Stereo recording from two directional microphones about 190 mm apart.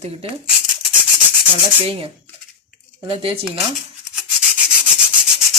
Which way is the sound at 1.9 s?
30° right (ahead or behind).